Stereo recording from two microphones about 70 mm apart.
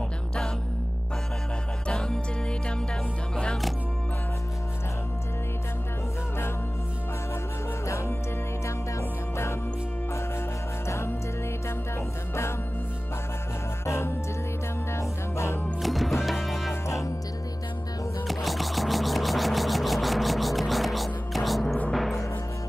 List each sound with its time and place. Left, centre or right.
1.9 s music: centre
7.8 s music: left
10.9 s music: left
13.8 s music: left
15.8 s music: centre
16.8 s music: left
18.2 s music: centre